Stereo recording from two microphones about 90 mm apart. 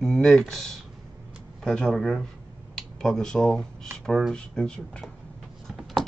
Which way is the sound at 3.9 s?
5° left (ahead or behind).